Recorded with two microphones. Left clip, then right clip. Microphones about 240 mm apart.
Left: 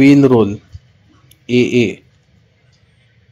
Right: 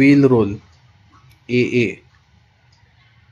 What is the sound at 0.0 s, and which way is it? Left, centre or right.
Speech, centre.